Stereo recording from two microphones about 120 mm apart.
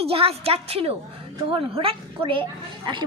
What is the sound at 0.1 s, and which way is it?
A woman's voice, 55° right (ahead or behind).